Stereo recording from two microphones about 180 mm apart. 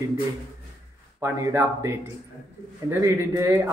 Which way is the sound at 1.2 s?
15° right (ahead or behind).